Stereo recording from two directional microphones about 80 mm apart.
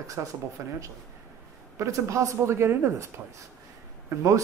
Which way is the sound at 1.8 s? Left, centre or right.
Right.